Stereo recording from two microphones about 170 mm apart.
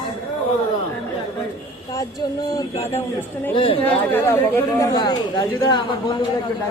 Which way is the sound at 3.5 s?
30° left (ahead or behind).